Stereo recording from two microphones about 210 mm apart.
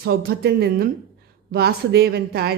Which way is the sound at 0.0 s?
50° right (ahead or behind).